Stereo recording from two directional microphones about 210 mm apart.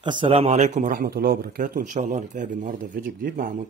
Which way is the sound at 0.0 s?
25° right (ahead or behind).